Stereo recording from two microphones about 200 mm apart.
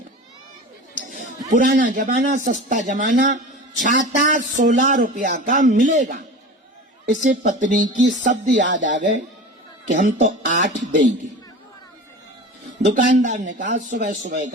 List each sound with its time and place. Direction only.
1.0 s a man's voice: 40° right (ahead or behind)
12.8 s speech: 35° right (ahead or behind)